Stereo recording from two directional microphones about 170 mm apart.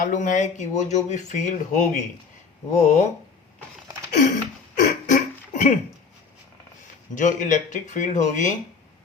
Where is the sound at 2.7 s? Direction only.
40° left (ahead or behind).